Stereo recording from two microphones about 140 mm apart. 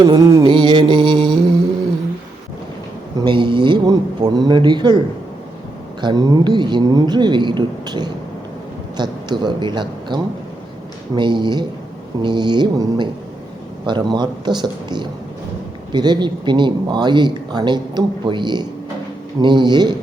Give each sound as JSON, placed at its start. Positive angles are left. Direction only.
{"t": 0.1, "sound": "music", "side_deg": -25}
{"t": 0.4, "sound": "music", "side_deg": -35}
{"t": 3.2, "sound": "a man's voice", "side_deg": -35}
{"t": 6.0, "sound": "a man's voice", "side_deg": -30}